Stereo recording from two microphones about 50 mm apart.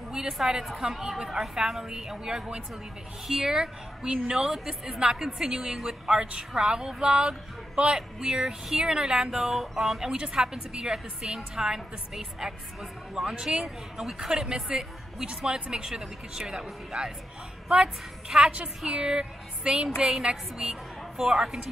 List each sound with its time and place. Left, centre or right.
0.1 s a woman's voice: centre
18.3 s speech: centre